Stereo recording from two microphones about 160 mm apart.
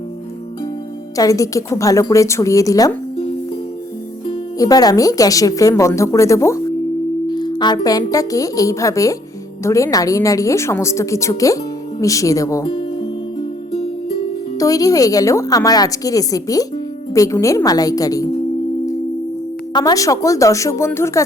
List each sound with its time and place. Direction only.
1.1 s a woman's voice: 20° left (ahead or behind)
4.3 s a woman's voice: 25° left (ahead or behind)
12.6 s music: 35° left (ahead or behind)
14.6 s a woman's voice: 20° left (ahead or behind)
19.7 s a woman's voice: 20° left (ahead or behind)